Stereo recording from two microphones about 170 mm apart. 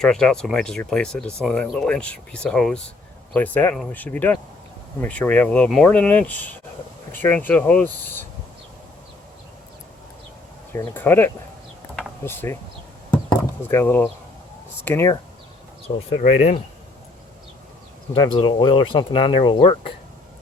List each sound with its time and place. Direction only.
0.0 s speech: 5° left (ahead or behind)
10.7 s speech: 15° left (ahead or behind)
13.6 s speech: 15° left (ahead or behind)
16.0 s speech: 40° left (ahead or behind)
18.1 s speech: 30° left (ahead or behind)